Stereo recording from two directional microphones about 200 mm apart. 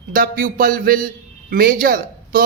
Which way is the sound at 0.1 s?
45° right (ahead or behind).